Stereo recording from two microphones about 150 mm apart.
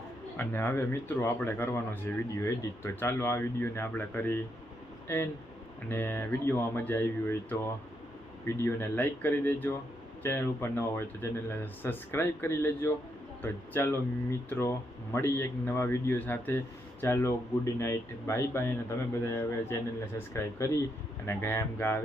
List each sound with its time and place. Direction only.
0.3 s speech: 15° left (ahead or behind)